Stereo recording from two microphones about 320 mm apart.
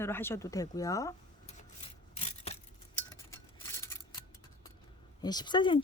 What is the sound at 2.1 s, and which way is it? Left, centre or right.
Keys jangling, centre.